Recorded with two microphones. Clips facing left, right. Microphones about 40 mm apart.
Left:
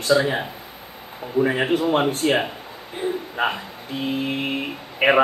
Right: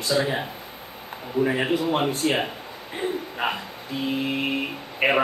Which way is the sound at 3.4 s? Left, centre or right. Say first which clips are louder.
Left 4 dB; left.